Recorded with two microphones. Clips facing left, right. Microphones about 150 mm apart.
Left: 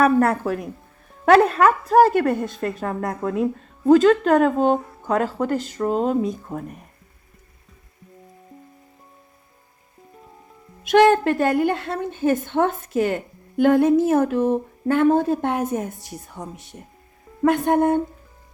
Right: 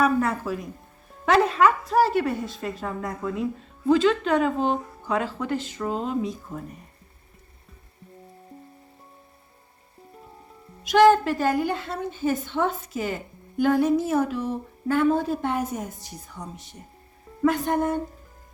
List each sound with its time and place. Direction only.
0.0 s a woman's voice: 55° left (ahead or behind)
3.8 s speech: 45° left (ahead or behind)
10.8 s a woman's voice: 55° left (ahead or behind)
17.4 s a woman's voice: 55° left (ahead or behind)